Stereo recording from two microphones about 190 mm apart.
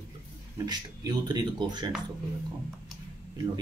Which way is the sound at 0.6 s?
20° right (ahead or behind).